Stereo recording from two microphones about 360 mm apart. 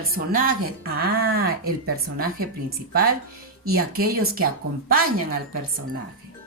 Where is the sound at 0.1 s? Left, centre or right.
Right.